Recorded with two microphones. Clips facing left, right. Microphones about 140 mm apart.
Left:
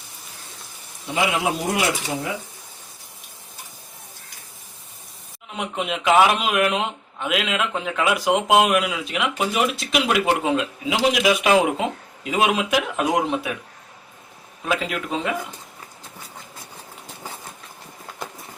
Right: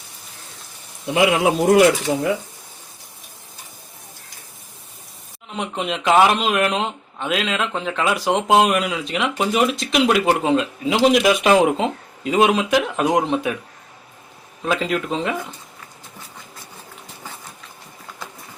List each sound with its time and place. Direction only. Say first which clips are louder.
1.6 s speech: right 10 dB; 60° right (ahead or behind)
5.5 s speech: right 2 dB; 5° left (ahead or behind)
14.7 s speech: right 3 dB; 5° left (ahead or behind)